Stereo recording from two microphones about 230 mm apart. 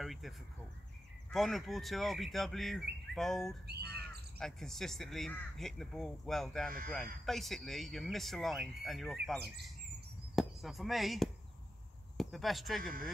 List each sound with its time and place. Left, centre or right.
0.0 s speech: centre
1.3 s speech: centre
3.6 s speech: right
4.4 s speech: centre